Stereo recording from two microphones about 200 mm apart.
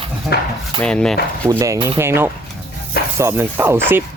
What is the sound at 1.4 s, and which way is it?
Speech, 15° right (ahead or behind).